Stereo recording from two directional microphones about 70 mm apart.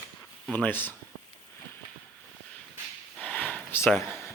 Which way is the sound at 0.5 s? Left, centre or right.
Left.